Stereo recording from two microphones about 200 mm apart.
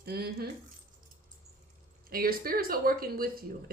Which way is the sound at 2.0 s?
45° right (ahead or behind).